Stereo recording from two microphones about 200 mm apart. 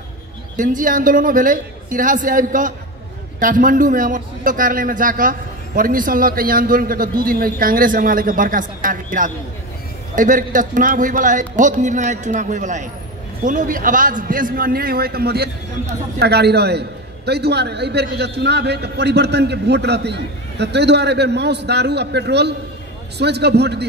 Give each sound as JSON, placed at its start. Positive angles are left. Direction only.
{"t": 0.6, "sound": "a man's voice", "side_deg": -40}